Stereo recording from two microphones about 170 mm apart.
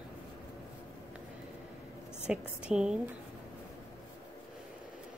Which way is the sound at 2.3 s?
5° right (ahead or behind).